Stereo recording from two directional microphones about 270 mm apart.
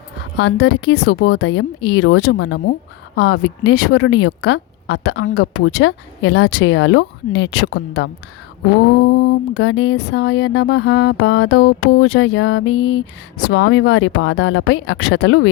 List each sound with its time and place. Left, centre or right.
0.3 s a woman's voice: left